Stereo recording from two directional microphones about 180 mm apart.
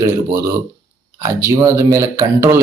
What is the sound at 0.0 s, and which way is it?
A man's voice, 15° right (ahead or behind).